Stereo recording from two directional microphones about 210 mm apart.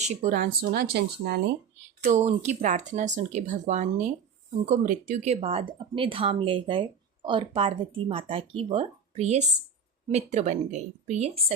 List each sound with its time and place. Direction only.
0.0 s speech: 35° right (ahead or behind); by 1.5 s 50° right (ahead or behind)
2.0 s speech: 35° right (ahead or behind)